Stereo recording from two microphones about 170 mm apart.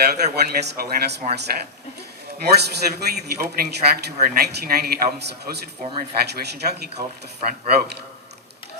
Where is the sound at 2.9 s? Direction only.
70° right (ahead or behind).